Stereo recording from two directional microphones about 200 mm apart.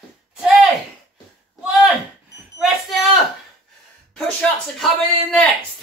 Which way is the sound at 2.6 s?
Centre (ahead or behind).